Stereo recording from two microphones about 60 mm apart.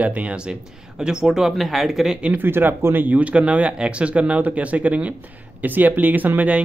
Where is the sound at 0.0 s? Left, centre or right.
Right.